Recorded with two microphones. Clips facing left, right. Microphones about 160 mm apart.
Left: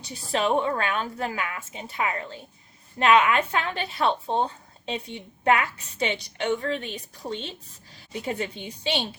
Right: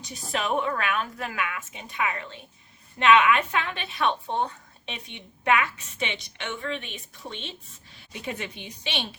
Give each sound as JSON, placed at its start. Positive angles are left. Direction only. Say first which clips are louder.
{"t": 0.0, "sound": "a woman's voice", "louder": "left 4 dB", "side_deg": 35}